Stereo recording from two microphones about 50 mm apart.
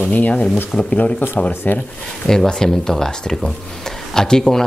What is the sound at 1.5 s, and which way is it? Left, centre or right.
Speech, left.